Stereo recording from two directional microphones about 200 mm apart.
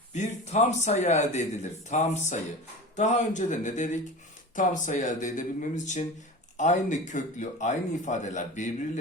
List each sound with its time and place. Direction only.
0.1 s speech: 35° left (ahead or behind)